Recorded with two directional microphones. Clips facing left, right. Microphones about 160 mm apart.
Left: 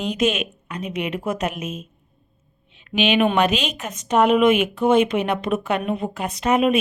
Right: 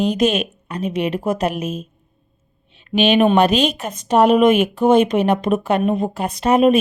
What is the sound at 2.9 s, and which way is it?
A woman's voice, 35° right (ahead or behind).